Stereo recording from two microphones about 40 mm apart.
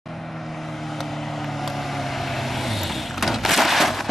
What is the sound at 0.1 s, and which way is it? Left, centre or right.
Vehicle, centre.